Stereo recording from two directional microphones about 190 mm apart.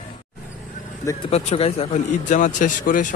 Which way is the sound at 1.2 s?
35° left (ahead or behind).